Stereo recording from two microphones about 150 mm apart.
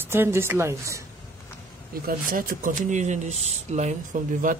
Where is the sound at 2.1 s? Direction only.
70° right (ahead or behind); by 3.9 s 50° right (ahead or behind).